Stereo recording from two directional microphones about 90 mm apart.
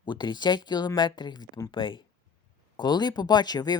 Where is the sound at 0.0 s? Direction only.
60° left (ahead or behind).